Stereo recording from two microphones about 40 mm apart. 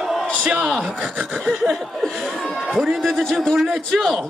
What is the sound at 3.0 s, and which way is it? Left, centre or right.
Speech, centre.